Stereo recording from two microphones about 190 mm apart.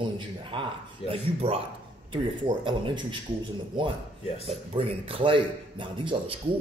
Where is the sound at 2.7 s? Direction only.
25° right (ahead or behind).